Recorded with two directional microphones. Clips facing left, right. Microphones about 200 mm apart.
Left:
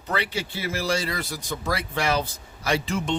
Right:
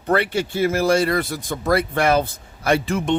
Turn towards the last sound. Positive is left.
turn(degrees=-55)  # may be behind; listen again after turning